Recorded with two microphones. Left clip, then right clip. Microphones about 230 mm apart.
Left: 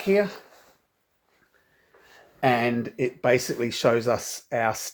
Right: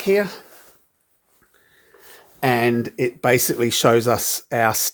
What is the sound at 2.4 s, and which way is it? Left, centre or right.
Speech, right.